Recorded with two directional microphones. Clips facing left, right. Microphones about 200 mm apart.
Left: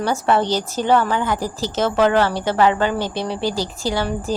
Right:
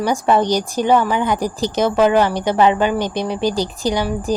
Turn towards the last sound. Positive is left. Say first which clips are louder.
# right 3 dB
turn(degrees=-15)  # may be behind; listen again after turning